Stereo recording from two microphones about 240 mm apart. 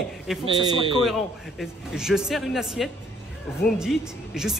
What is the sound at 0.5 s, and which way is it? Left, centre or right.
Speech, right.